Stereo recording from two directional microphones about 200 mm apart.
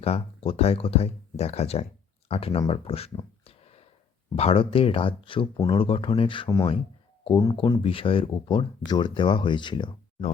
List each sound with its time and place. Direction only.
0.0 s speech: 30° left (ahead or behind)